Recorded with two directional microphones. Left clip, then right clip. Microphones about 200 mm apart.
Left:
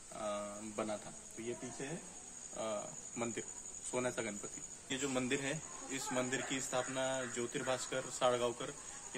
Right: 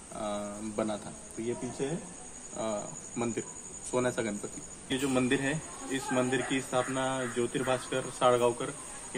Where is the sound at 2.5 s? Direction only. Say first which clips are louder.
Right 6 dB; 15° left (ahead or behind).